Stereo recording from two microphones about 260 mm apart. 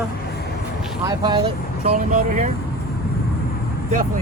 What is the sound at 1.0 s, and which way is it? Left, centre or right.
Speech, centre.